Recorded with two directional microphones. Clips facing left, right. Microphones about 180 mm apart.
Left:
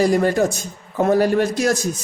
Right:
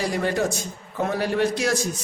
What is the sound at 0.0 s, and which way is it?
Speech, 45° left (ahead or behind).